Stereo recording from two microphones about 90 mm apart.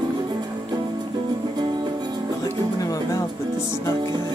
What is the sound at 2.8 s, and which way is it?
Music, 40° left (ahead or behind).